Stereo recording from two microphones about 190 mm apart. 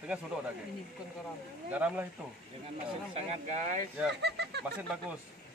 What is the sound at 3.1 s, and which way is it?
Speech, 30° right (ahead or behind).